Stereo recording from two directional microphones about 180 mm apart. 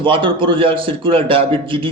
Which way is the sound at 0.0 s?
30° right (ahead or behind).